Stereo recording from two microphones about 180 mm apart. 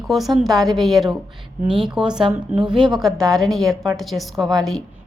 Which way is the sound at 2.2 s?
25° right (ahead or behind).